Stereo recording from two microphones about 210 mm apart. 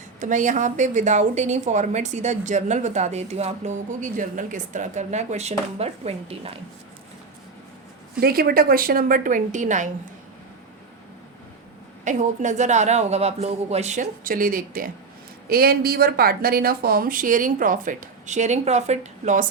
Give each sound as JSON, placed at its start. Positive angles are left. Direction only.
{"t": 0.2, "sound": "a woman's voice", "side_deg": -35}
{"t": 8.2, "sound": "a woman's voice", "side_deg": -45}
{"t": 12.0, "sound": "a woman's voice", "side_deg": -35}